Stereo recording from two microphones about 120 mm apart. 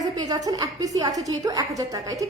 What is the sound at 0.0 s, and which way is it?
A woman's voice, 30° right (ahead or behind).